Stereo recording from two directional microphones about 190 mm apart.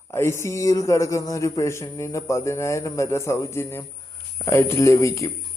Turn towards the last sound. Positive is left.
turn(degrees=15)  # may be behind; listen again after turning